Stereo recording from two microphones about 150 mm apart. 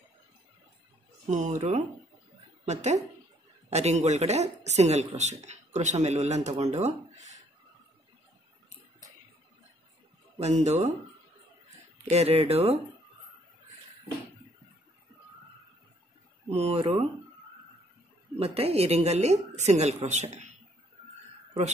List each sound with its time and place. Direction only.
1.3 s speech: 55° right (ahead or behind)
10.4 s speech: 50° right (ahead or behind)
12.0 s speech: 45° right (ahead or behind)
16.4 s speech: 45° right (ahead or behind)
18.4 s speech: 40° right (ahead or behind)